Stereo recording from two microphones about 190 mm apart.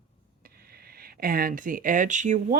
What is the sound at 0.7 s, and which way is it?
Speech, 55° right (ahead or behind).